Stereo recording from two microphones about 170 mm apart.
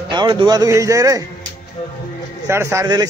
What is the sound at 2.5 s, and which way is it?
Speech, 15° right (ahead or behind).